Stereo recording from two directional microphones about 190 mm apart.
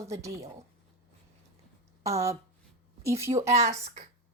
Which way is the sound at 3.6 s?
35° right (ahead or behind).